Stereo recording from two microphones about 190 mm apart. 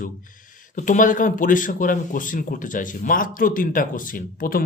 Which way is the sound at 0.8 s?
45° left (ahead or behind).